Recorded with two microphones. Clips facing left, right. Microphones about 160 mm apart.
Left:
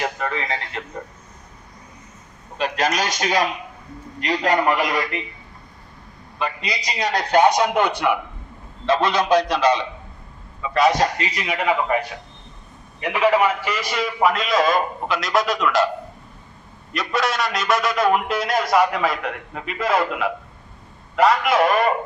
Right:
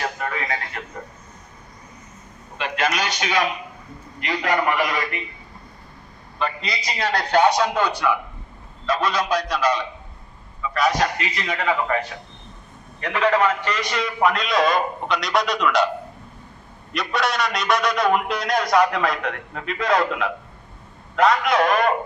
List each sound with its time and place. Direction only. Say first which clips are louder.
0.4 s a man's voice: even; 25° left (ahead or behind)
2.6 s a man's voice: left 2 dB; 40° left (ahead or behind)
6.4 s a man's voice: even; 15° left (ahead or behind)
8.9 s a man's voice: left 4 dB; 25° left (ahead or behind)
11.3 s a man's voice: left 2 dB; 10° left (ahead or behind)
13.0 s a man's voice: left 2 dB; 10° left (ahead or behind)
16.9 s a man's voice: left 1 dB; centre (ahead or behind)